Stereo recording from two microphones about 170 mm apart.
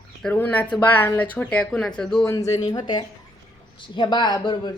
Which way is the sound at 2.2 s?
20° left (ahead or behind).